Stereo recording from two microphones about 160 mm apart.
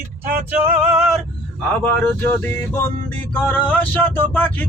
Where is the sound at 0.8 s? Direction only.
Centre (ahead or behind).